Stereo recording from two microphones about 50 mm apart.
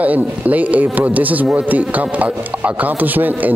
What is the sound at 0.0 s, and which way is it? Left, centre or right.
Speech, right.